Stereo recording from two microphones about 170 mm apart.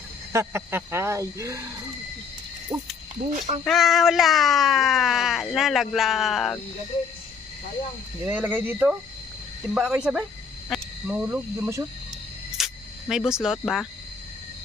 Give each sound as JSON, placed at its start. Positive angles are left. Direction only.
{"t": 0.3, "sound": "speech", "side_deg": -15}
{"t": 2.7, "sound": "speech", "side_deg": -15}
{"t": 3.6, "sound": "speech", "side_deg": 0}
{"t": 8.3, "sound": "speech", "side_deg": -10}
{"t": 12.5, "sound": "cricket", "side_deg": 0}